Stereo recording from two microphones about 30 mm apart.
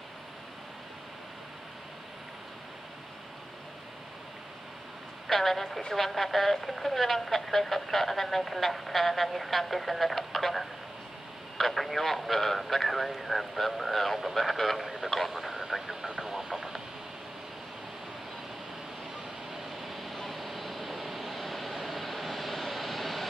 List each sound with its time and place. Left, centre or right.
5.3 s a woman's voice: centre
19.5 s vehicle: centre